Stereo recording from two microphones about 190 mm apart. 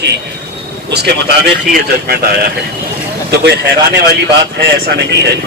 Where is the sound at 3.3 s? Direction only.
60° right (ahead or behind).